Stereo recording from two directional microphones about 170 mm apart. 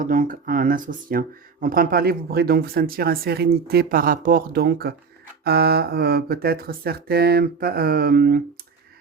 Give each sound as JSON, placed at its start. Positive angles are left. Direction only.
{"t": 0.0, "sound": "speech", "side_deg": -45}